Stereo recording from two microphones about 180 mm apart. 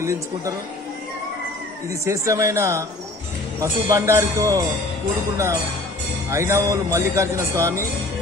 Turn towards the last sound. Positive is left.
turn(degrees=-15)  # may be behind; listen again after turning